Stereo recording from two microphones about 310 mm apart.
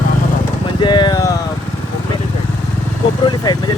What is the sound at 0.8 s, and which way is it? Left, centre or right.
Vehicle, centre.